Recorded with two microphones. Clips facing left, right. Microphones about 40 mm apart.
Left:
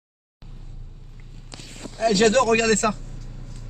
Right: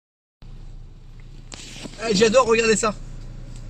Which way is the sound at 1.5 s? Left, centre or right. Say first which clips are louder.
Right 1 dB; right.